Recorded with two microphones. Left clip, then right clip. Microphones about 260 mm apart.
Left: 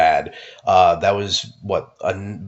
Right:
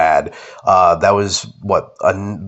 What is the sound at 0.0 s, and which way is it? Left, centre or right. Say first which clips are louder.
Speech: right 3 dB; right.